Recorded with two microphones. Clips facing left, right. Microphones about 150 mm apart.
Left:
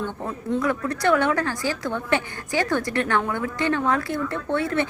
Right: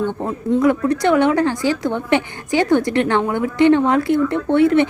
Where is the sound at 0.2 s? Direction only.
25° right (ahead or behind).